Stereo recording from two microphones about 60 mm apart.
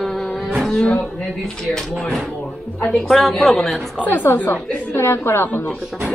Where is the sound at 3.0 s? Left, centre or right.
Centre.